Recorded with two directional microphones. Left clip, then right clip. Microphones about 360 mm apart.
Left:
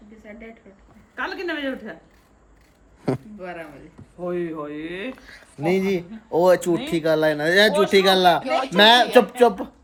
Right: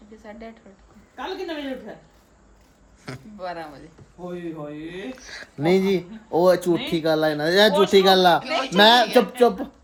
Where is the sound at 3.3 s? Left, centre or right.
Centre.